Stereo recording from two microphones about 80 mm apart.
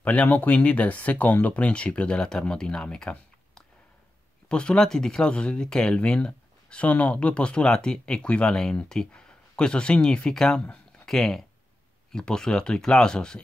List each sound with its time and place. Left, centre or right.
0.0 s speech: centre